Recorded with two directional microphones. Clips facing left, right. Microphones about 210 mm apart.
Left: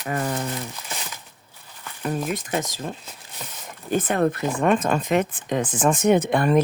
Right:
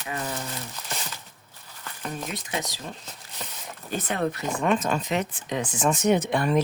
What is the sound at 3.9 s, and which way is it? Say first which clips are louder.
Speech: left 6 dB; 50° left (ahead or behind).